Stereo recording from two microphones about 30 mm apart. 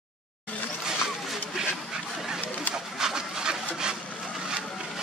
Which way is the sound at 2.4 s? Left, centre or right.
Left.